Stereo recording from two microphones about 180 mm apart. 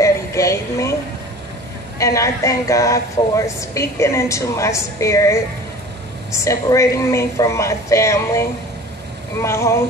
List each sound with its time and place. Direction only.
0.0 s music: 15° left (ahead or behind)
2.0 s speech: 15° left (ahead or behind)